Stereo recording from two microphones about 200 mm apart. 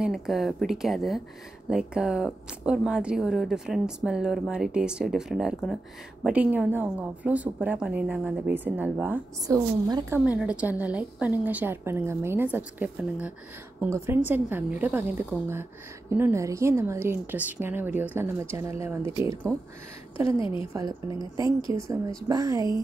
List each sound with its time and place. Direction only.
0.0 s a woman's voice: centre (ahead or behind)
19.5 s speech: 5° left (ahead or behind)
20.2 s a woman's voice: 25° left (ahead or behind)
20.7 s a woman's voice: 20° right (ahead or behind)